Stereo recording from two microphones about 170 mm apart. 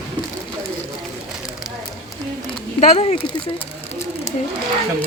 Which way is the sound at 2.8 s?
40° left (ahead or behind).